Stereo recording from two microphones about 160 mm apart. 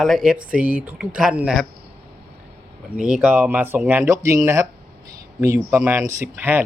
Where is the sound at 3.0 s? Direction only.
5° right (ahead or behind).